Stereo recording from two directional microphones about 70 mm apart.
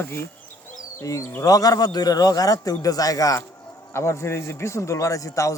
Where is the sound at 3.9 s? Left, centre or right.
Left.